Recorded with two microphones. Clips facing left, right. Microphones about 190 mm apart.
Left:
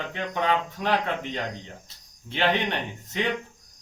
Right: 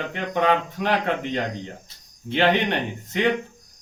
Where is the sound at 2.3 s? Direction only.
60° right (ahead or behind).